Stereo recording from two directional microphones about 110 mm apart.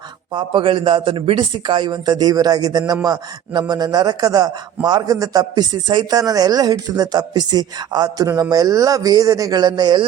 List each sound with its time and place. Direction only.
0.3 s a man's voice: 50° right (ahead or behind)
6.1 s a man's voice: 35° right (ahead or behind)